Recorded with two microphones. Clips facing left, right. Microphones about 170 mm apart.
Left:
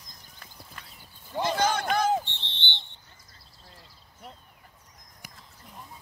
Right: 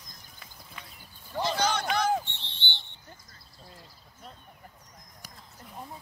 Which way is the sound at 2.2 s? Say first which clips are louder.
Left 2 dB; 35° left (ahead or behind).